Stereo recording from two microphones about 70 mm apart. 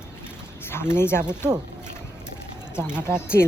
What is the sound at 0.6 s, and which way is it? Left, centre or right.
Speech, left.